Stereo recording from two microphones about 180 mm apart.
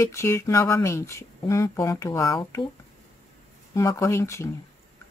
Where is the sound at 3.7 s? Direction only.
15° left (ahead or behind).